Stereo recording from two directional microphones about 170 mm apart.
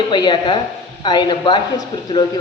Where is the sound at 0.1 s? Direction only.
25° left (ahead or behind).